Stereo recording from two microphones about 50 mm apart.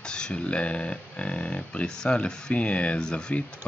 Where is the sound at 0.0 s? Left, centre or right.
Centre.